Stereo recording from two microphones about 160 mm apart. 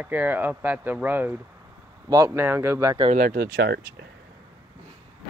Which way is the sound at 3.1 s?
65° right (ahead or behind).